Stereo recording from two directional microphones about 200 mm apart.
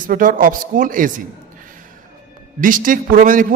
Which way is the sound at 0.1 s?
45° right (ahead or behind).